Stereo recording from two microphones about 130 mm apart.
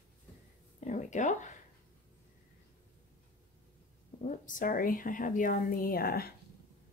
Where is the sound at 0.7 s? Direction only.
70° left (ahead or behind).